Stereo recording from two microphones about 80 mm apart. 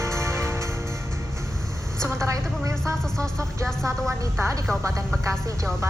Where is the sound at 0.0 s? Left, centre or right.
Right.